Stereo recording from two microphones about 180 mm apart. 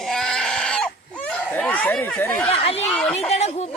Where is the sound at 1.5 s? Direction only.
5° left (ahead or behind).